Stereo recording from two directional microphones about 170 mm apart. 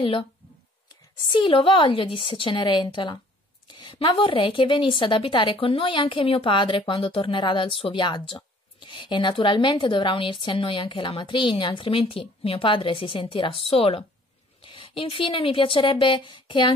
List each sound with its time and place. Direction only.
1.3 s a woman's voice: 30° left (ahead or behind)